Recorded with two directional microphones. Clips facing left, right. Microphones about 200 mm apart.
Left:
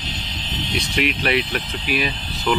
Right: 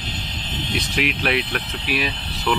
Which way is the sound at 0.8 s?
Centre (ahead or behind).